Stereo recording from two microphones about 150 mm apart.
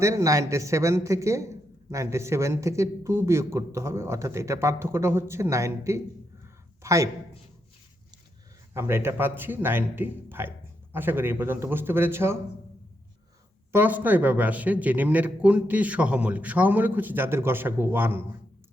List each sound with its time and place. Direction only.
0.0 s a man's voice: 20° right (ahead or behind)
8.7 s a man's voice: 15° right (ahead or behind)
13.7 s a man's voice: 10° right (ahead or behind)